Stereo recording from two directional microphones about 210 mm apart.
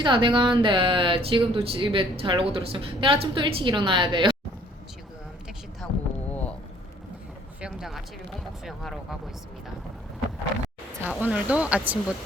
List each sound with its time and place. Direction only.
0.0 s speech: 25° right (ahead or behind)
5.8 s a sound: 5° left (ahead or behind)
7.6 s speech: centre (ahead or behind)
11.0 s speech: 5° right (ahead or behind)